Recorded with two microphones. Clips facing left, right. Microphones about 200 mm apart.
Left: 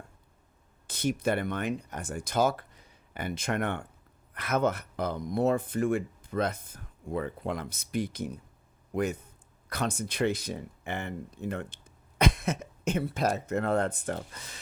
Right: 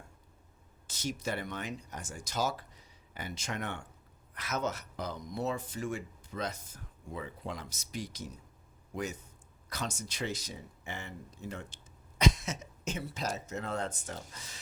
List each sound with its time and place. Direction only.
0.9 s speech: 55° left (ahead or behind)